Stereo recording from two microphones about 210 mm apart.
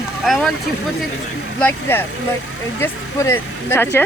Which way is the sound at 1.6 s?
10° left (ahead or behind).